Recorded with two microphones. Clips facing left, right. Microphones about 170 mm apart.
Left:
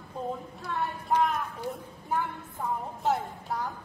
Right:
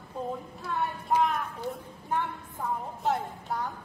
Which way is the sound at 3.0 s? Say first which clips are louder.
Left 1 dB; centre (ahead or behind).